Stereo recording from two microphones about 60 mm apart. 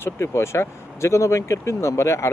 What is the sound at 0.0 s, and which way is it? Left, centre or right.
Speech, left.